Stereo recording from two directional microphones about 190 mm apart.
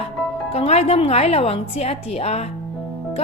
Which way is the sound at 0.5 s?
35° left (ahead or behind).